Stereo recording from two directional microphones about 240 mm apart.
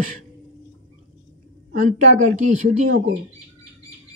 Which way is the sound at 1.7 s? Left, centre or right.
Right.